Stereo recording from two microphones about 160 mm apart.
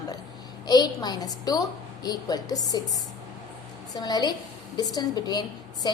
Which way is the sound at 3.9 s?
25° left (ahead or behind).